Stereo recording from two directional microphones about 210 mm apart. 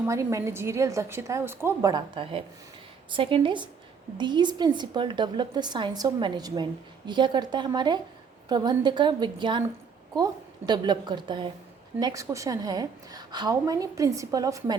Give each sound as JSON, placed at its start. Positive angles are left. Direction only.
{"t": 0.1, "sound": "a woman's voice", "side_deg": -15}